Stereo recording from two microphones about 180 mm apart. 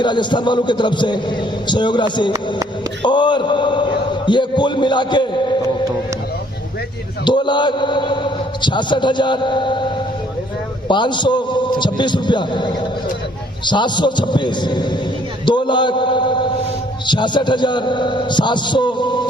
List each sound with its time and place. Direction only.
0.0 s a man's voice: 25° left (ahead or behind)
7.3 s a man's voice: 25° left (ahead or behind)